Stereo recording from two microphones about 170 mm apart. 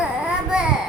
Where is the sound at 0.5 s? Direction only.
5° right (ahead or behind).